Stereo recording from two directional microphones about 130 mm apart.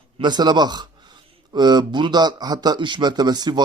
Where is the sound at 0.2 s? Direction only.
35° right (ahead or behind).